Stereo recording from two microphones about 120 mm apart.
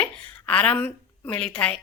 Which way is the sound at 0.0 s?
10° left (ahead or behind).